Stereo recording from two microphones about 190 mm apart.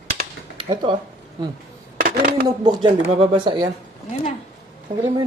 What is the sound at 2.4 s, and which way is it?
Speech, 20° right (ahead or behind).